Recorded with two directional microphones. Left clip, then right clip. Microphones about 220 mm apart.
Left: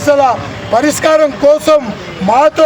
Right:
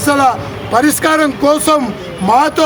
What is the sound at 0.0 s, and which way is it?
A man's voice, 5° right (ahead or behind).